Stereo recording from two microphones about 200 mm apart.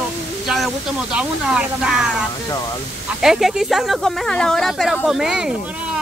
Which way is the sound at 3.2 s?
Centre (ahead or behind).